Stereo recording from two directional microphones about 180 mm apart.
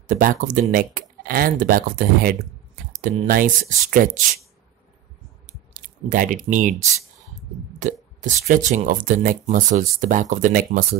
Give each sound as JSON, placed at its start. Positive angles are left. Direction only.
{"t": 0.0, "sound": "speech", "side_deg": -45}
{"t": 5.5, "sound": "a sound", "side_deg": -45}
{"t": 7.8, "sound": "speech", "side_deg": -45}